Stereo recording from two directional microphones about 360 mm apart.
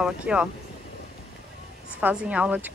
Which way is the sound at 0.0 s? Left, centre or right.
Centre.